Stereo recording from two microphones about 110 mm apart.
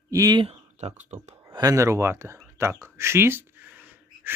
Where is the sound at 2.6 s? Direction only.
25° right (ahead or behind).